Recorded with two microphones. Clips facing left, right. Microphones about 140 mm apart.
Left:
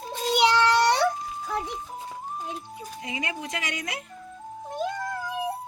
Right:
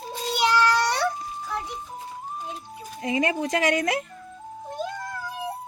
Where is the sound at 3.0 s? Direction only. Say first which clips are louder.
Right 10 dB; 50° right (ahead or behind).